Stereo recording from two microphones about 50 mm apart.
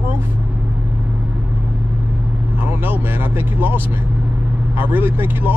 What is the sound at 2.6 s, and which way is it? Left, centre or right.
Speech, right.